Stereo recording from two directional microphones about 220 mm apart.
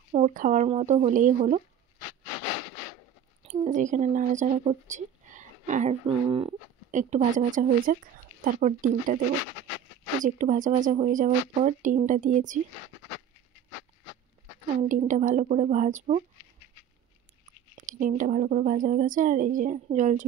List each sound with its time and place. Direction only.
0.1 s speech: 35° right (ahead or behind)
3.4 s speech: 30° right (ahead or behind)
10.2 s speech: 35° right (ahead or behind)
14.8 s speech: 35° right (ahead or behind)
17.7 s speech: 35° right (ahead or behind)